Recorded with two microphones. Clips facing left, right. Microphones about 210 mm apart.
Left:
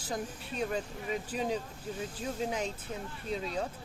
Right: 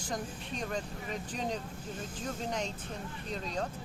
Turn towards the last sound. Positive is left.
turn(degrees=5)  # may be behind; listen again after turning